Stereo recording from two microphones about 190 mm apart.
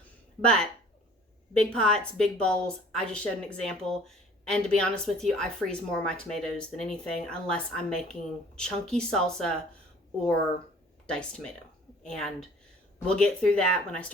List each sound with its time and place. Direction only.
0.4 s a woman's voice: 5° left (ahead or behind)
11.0 s a woman's voice: 5° left (ahead or behind)